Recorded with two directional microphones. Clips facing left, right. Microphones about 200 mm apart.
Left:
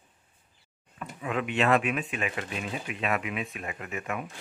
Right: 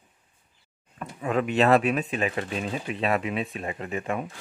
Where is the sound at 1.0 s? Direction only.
40° right (ahead or behind).